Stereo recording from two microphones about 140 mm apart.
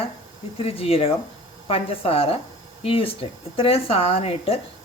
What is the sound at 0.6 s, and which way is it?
Speech, 45° left (ahead or behind).